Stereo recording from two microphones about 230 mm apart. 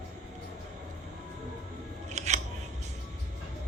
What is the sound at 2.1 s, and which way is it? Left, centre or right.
Scissors, right.